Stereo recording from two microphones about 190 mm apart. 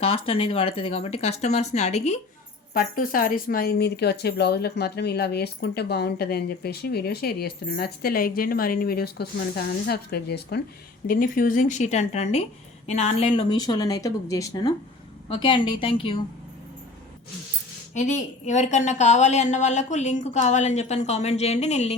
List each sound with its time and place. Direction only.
0.0 s a woman's voice: 30° left (ahead or behind)
2.7 s speech: 45° left (ahead or behind)
11.0 s a woman's voice: 45° left (ahead or behind); by 16.2 s 30° left (ahead or behind)
17.9 s a woman's voice: 40° left (ahead or behind)